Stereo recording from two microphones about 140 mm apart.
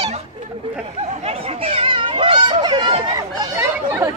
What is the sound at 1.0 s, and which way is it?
Speech, 45° right (ahead or behind).